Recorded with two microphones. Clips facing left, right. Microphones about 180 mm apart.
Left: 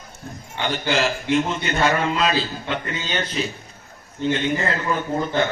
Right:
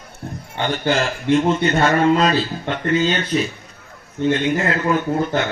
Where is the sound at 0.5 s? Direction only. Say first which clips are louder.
Right 3 dB; 50° right (ahead or behind).